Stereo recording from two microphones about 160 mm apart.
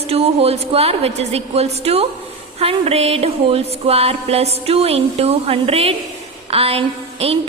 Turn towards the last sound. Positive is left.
turn(degrees=-40)  # may be behind; listen again after turning